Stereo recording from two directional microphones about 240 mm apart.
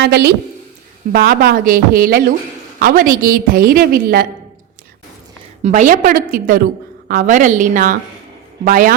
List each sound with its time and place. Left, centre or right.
0.0 s a woman's voice: right
5.6 s a woman's voice: right